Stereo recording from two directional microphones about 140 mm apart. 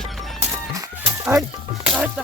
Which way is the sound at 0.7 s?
20° right (ahead or behind).